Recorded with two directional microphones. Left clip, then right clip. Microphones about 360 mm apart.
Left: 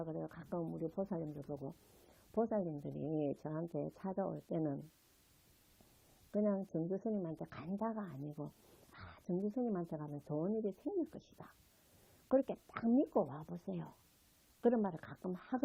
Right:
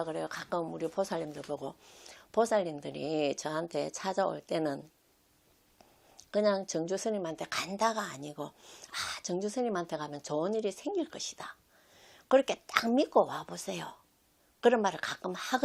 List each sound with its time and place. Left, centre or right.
0.0 s speech: centre
3.3 s speech: centre
6.3 s speech: centre
8.9 s speech: centre; by 11.0 s right
11.1 s speech: centre
14.6 s speech: centre